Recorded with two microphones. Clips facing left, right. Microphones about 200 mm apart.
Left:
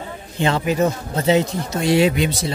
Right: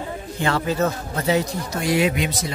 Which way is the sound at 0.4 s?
20° left (ahead or behind).